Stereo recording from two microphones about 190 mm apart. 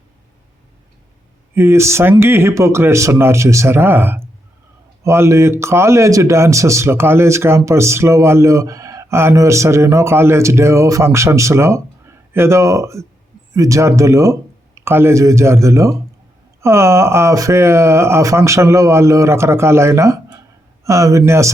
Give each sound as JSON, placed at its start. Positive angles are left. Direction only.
{"t": 1.5, "sound": "a man's voice", "side_deg": -15}